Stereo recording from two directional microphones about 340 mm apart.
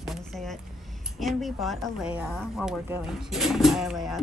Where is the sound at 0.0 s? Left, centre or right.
Centre.